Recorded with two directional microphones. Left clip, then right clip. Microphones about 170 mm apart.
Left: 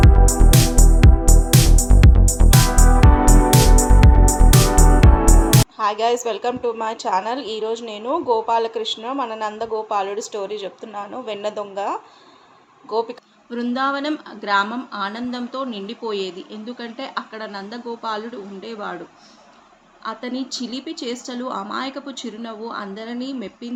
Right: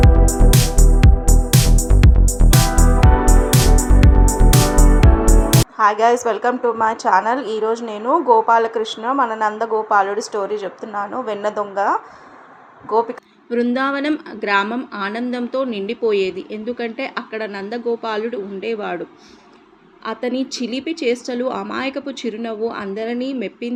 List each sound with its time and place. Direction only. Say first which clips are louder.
0.0 s music: right 2 dB; centre (ahead or behind)
5.7 s music: right 10 dB; 25° right (ahead or behind)
6.2 s a woman's voice: right 5 dB; 25° right (ahead or behind)
13.5 s a woman's voice: right 3 dB; 20° right (ahead or behind)
20.7 s a woman's voice: right 13 dB; 15° right (ahead or behind)